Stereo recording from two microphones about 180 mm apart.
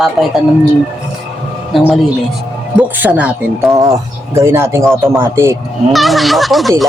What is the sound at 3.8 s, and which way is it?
Speech, 15° right (ahead or behind).